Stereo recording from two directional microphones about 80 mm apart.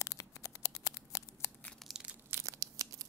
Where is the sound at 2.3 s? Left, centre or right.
Right.